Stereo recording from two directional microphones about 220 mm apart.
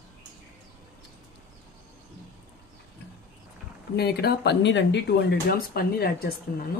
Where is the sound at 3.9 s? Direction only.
45° left (ahead or behind).